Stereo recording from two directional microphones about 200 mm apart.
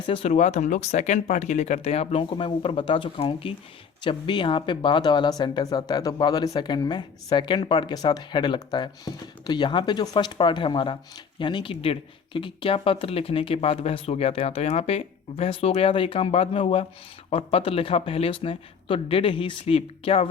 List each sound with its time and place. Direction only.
0.0 s speech: 30° left (ahead or behind)